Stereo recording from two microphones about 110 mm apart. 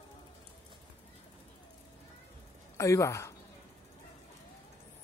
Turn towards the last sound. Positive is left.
turn(degrees=25)  # may be behind; listen again after turning